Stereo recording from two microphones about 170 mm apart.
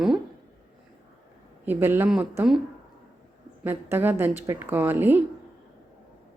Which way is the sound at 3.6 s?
10° right (ahead or behind).